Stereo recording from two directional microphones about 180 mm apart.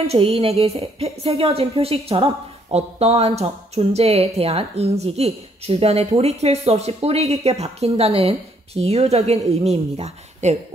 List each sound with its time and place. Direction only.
0.0 s speech: 35° right (ahead or behind)